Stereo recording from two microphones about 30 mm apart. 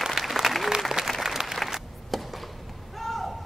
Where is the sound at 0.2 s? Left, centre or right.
Centre.